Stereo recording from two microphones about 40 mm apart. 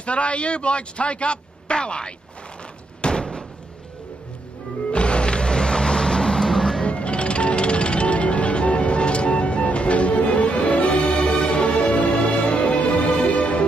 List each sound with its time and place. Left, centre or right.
0.0 s a man's voice: left
3.0 s door: left
4.9 s music: left; by 6.8 s centre
6.8 s music: left